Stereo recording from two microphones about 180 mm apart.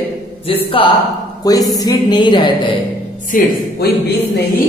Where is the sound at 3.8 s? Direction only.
60° left (ahead or behind).